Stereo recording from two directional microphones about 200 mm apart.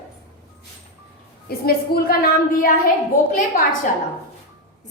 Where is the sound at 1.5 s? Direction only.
50° left (ahead or behind).